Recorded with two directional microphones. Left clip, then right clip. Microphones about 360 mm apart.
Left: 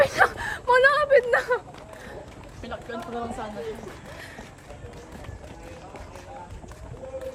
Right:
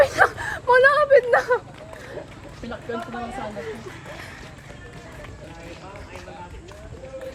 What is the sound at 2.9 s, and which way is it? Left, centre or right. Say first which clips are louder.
Speech: right 6 dB; centre.